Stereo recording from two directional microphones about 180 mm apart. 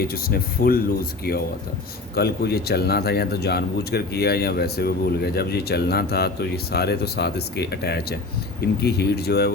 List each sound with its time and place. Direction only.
0.0 s speech: 55° left (ahead or behind)
2.1 s speech: 60° left (ahead or behind)